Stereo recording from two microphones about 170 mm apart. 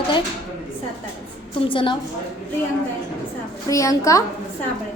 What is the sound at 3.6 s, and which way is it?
Speech, 20° left (ahead or behind).